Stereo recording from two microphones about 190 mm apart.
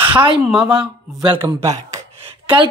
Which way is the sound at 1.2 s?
30° right (ahead or behind).